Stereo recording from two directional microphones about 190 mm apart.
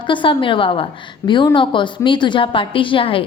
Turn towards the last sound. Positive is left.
turn(degrees=30)  # may be behind; listen again after turning